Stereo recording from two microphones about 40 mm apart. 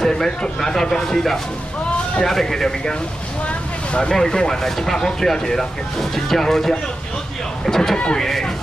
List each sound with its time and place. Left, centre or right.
0.0 s speech: centre
3.4 s a sound: left
4.1 s speech: centre